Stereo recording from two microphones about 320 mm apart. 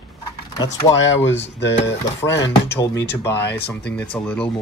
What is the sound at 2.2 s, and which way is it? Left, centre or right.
Speech, centre.